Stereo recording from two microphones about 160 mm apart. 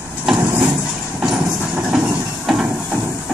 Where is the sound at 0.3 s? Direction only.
10° right (ahead or behind).